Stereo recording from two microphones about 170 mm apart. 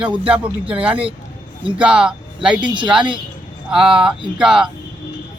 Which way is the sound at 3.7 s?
5° right (ahead or behind).